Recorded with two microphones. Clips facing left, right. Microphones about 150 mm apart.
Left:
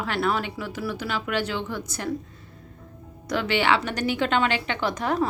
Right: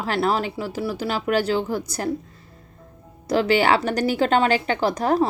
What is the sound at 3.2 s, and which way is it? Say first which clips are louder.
Speech: right 5 dB; 35° right (ahead or behind).